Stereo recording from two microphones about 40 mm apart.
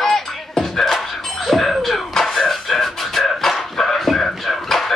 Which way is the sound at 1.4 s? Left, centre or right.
Centre.